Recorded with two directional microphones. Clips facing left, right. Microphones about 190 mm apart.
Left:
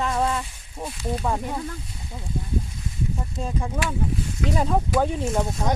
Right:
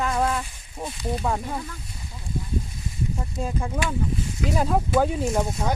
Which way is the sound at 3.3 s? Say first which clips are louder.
Right 1 dB; centre (ahead or behind).